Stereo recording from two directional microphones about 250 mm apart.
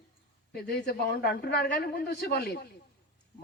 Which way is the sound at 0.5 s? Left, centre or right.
Left.